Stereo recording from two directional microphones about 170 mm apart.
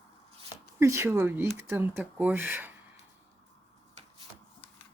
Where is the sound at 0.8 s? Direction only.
15° right (ahead or behind).